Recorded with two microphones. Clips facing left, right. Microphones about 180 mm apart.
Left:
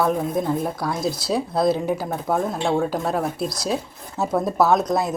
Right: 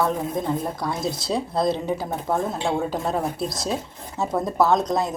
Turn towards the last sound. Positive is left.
turn(degrees=5)  # may be behind; listen again after turning